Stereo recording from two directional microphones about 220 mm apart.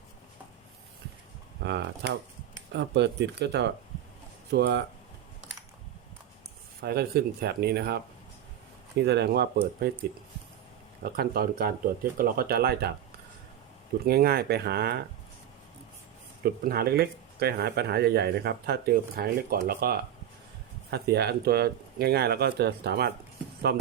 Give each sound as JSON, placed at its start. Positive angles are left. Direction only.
{"t": 1.6, "sound": "speech", "side_deg": -50}
{"t": 6.8, "sound": "speech", "side_deg": -45}
{"t": 11.0, "sound": "speech", "side_deg": -45}
{"t": 14.0, "sound": "speech", "side_deg": -45}
{"t": 16.4, "sound": "speech", "side_deg": -45}